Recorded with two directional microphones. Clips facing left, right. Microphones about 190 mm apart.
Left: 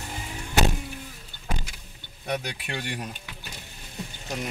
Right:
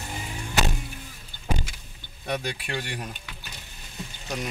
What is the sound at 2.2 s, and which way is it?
Speech, 15° left (ahead or behind).